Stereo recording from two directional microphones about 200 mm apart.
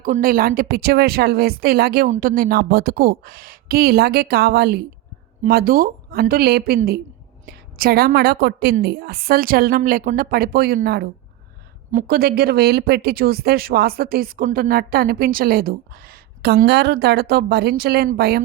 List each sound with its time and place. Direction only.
0.0 s speech: 45° right (ahead or behind)
2.0 s speech: 40° right (ahead or behind)